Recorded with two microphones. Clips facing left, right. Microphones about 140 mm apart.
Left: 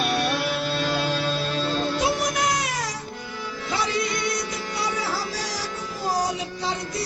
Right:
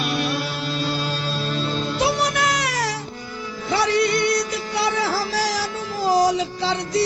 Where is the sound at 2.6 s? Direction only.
75° right (ahead or behind).